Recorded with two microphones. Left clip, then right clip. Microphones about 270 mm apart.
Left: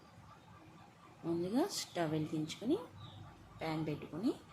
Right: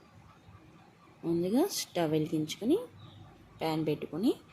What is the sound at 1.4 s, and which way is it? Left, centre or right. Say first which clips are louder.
A woman's voice: right 6 dB; centre.